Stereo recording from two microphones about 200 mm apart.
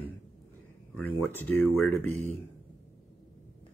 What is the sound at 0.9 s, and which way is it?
Speech, 10° left (ahead or behind).